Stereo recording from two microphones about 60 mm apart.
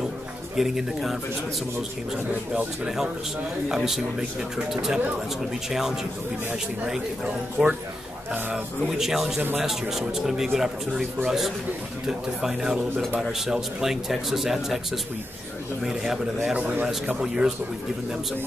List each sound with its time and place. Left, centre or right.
0.6 s a man's voice: centre
2.5 s speech: right
3.6 s speech: centre
7.6 s a man's voice: centre
8.8 s a man's voice: centre